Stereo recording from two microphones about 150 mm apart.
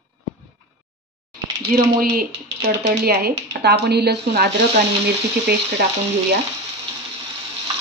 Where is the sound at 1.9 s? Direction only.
85° right.